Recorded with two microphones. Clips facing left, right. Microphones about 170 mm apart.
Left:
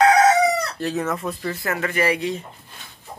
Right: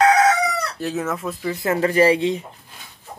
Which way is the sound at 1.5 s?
20° right (ahead or behind).